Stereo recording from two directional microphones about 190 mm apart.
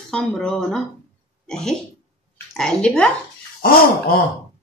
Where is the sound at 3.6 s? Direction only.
50° left (ahead or behind).